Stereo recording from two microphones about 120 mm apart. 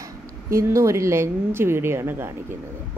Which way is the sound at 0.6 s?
25° right (ahead or behind).